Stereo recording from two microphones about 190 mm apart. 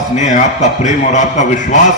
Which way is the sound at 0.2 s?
40° left (ahead or behind).